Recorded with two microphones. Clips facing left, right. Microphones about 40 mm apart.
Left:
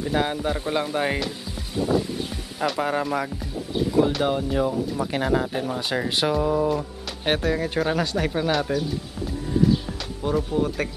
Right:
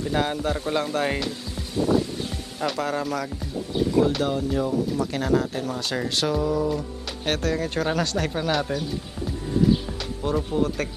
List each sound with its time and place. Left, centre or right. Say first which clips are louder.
0.0 s speech: left 1 dB; centre
2.0 s a sound: even; centre
2.8 s speech: left 3 dB; centre
9.8 s speech: even; centre